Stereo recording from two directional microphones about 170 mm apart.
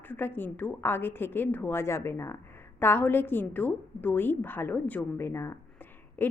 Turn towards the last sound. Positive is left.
turn(degrees=10)  # may be behind; listen again after turning